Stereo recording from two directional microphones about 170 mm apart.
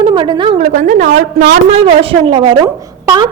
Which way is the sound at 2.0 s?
30° right (ahead or behind).